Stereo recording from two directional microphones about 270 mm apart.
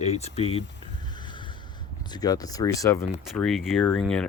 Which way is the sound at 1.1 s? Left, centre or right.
Centre.